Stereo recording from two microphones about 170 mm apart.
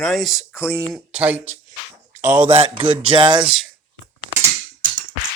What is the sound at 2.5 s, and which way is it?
Speech, 30° right (ahead or behind).